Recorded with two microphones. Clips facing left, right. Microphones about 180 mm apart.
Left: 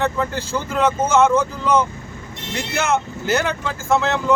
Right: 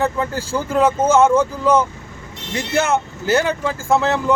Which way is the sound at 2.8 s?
30° right (ahead or behind).